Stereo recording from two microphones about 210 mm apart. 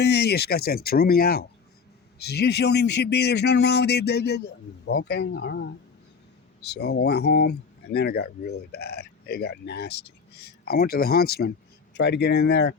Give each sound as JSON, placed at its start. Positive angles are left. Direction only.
{"t": 0.0, "sound": "speech", "side_deg": 50}